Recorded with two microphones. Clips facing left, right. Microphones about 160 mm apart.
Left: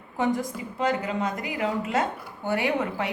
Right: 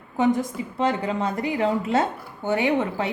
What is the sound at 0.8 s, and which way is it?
Speech, 30° right (ahead or behind).